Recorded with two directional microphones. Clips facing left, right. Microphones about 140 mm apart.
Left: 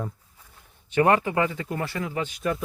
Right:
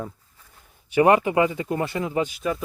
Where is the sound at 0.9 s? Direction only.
15° right (ahead or behind).